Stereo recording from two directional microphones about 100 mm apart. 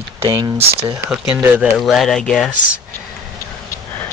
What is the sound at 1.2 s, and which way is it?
Speech, 20° right (ahead or behind).